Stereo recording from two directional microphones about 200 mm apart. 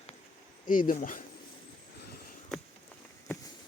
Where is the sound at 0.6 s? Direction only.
40° left (ahead or behind).